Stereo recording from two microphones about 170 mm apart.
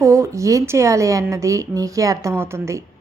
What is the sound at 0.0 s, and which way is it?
Speech, 15° right (ahead or behind).